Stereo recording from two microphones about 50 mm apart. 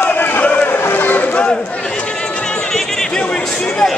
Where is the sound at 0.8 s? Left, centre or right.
Left.